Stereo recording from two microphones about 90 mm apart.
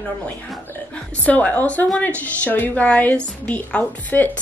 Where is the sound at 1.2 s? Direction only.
15° left (ahead or behind).